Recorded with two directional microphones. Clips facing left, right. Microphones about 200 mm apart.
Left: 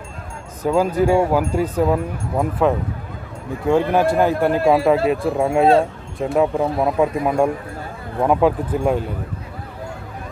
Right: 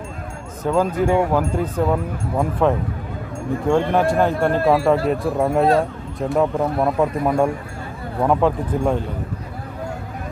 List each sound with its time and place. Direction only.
0.7 s speech: 10° left (ahead or behind)
5.7 s speech: 25° left (ahead or behind)
6.3 s speech: 5° left (ahead or behind)